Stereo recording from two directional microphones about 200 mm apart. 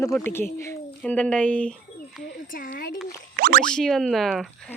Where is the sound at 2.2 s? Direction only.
45° left (ahead or behind).